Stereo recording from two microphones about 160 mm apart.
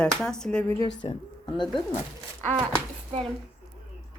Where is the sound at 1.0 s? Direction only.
30° left (ahead or behind).